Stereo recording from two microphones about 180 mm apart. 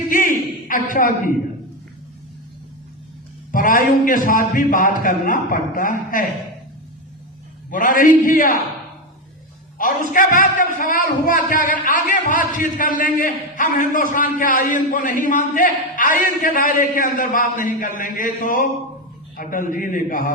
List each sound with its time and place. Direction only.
0.1 s a man's voice: 50° left (ahead or behind)
3.5 s a man's voice: 50° left (ahead or behind)
7.7 s a man's voice: 50° left (ahead or behind)
9.7 s a man's voice: 50° left (ahead or behind)